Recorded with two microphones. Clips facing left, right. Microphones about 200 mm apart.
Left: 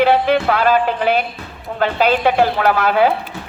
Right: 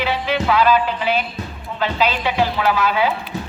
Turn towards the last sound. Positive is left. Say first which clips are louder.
# left 4 dB
turn(degrees=55)  # may be behind; listen again after turning